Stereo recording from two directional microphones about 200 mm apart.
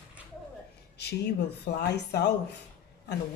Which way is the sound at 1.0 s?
55° left (ahead or behind).